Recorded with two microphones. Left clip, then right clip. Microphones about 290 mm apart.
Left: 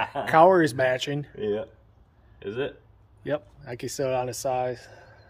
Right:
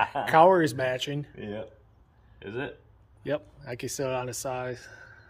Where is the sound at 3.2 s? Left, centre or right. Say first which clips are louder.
Left 2 dB; centre.